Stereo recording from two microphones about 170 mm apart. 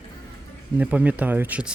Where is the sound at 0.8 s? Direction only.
10° right (ahead or behind).